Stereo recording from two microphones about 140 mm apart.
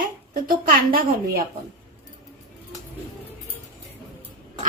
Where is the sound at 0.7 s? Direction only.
90° right.